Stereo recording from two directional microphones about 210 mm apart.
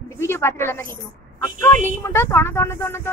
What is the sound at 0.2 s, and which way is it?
Speech, 10° left (ahead or behind).